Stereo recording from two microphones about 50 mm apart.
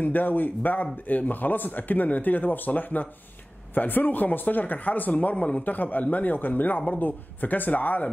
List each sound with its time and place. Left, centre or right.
0.0 s speech: left
5.3 s a man's voice: left
5.6 s speech: left